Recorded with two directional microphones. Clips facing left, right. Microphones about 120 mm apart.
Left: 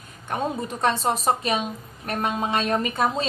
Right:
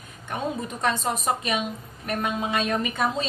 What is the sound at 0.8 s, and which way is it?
Speech, 35° left (ahead or behind).